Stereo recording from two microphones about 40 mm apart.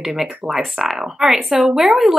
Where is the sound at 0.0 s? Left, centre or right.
Centre.